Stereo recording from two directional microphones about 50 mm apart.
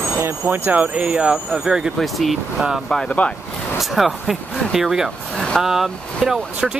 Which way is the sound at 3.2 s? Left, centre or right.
Left.